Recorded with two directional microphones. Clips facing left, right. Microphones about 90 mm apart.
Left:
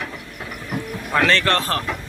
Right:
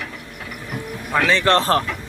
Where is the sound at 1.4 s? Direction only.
30° right (ahead or behind).